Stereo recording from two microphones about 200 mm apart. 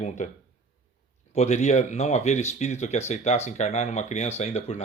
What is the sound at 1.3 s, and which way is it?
Speech, 35° left (ahead or behind).